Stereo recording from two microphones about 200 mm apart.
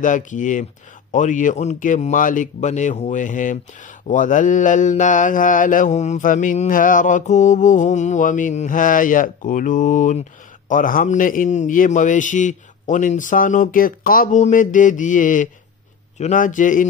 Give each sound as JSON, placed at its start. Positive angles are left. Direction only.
{"t": 0.0, "sound": "speech", "side_deg": 40}